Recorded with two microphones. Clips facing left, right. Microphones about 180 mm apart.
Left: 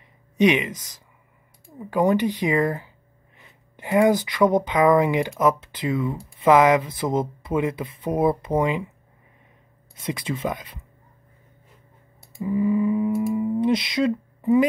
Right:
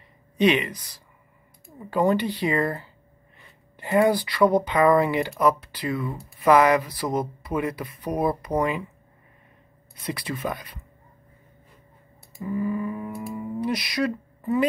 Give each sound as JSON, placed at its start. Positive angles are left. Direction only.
{"t": 0.4, "sound": "speech", "side_deg": 15}
{"t": 1.8, "sound": "speech", "side_deg": 15}
{"t": 9.9, "sound": "speech", "side_deg": 25}
{"t": 12.4, "sound": "speech", "side_deg": 20}